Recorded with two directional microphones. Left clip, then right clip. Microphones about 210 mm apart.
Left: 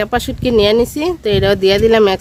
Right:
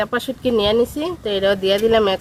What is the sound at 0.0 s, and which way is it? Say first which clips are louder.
Speech: left 4 dB; 55° left (ahead or behind).